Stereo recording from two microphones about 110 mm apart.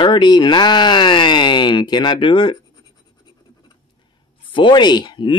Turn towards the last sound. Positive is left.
turn(degrees=45)  # may be behind; listen again after turning